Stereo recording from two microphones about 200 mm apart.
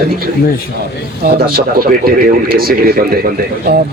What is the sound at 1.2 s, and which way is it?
Speech, 50° right (ahead or behind).